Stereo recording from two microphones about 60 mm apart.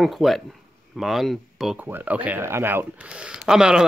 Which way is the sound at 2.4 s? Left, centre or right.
Right.